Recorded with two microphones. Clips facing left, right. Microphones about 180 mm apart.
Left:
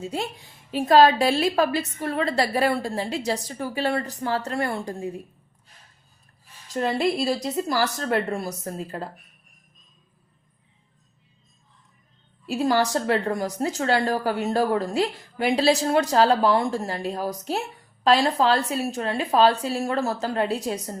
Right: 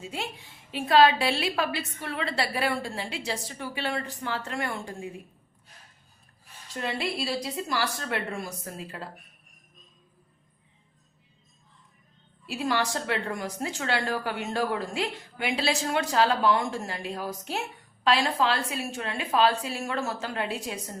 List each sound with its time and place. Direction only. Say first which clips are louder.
0.0 s a woman's voice: left 6 dB; 40° left (ahead or behind)
6.7 s a woman's voice: left 8 dB; 40° left (ahead or behind)
12.5 s a woman's voice: left 6 dB; 40° left (ahead or behind)